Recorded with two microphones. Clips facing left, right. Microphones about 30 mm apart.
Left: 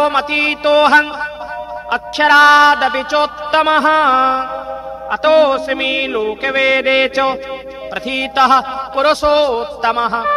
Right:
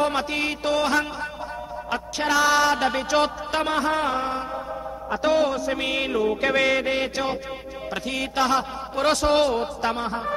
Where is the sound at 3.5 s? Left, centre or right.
Left.